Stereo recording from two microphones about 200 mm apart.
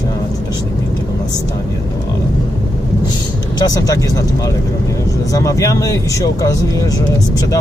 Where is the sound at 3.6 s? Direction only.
20° left (ahead or behind).